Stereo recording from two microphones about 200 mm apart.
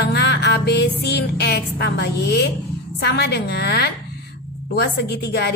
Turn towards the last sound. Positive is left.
turn(degrees=55)  # may be behind; listen again after turning